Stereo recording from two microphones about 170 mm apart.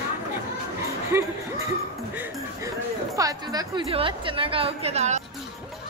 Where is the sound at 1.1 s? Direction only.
15° right (ahead or behind).